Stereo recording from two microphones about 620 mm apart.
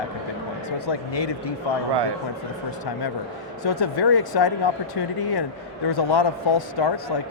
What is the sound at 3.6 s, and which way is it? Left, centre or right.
Speech, left.